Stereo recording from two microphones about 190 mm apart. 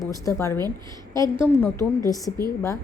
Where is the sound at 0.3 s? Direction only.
15° left (ahead or behind).